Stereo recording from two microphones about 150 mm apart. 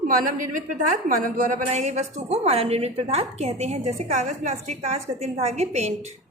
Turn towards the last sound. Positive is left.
turn(degrees=-45)  # may be behind; listen again after turning